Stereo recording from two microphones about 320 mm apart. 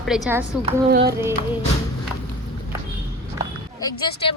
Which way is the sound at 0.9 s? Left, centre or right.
Right.